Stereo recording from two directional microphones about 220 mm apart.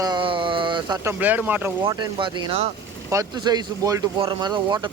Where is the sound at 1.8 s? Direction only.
20° right (ahead or behind).